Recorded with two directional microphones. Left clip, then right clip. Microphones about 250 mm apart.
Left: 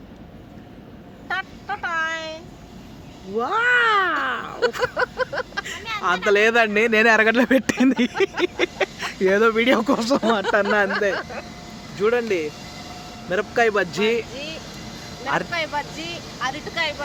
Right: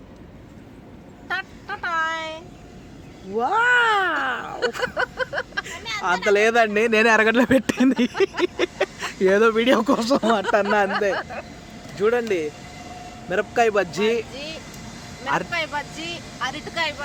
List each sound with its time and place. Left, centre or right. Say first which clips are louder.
1.3 s child singing: left 1 dB; centre
3.3 s cat: right 1 dB; centre
4.9 s a sound: left 1 dB; centre
5.6 s speech: left 3 dB; centre
11.1 s speech: even; left
11.9 s speech: even; centre